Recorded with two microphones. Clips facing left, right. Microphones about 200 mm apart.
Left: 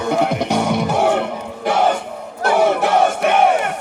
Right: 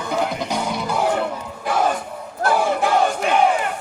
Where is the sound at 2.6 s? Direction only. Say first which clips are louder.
Left 5 dB; 65° left (ahead or behind).